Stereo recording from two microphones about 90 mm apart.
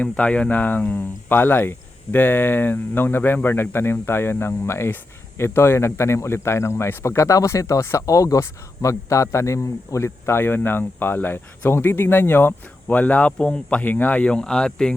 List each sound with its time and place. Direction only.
0.0 s speech: 15° left (ahead or behind)